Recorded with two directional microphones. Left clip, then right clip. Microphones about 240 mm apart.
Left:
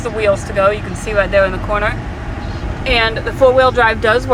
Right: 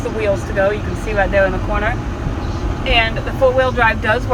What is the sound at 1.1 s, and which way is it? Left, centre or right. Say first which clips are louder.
Speech: left 2 dB; centre.